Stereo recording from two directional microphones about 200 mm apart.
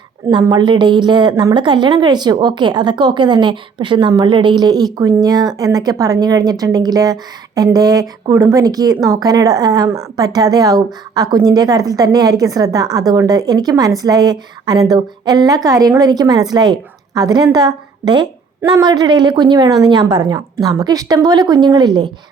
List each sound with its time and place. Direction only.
0.3 s a woman's voice: 20° right (ahead or behind)